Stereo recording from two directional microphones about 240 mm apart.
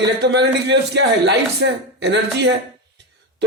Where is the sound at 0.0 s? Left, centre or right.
Right.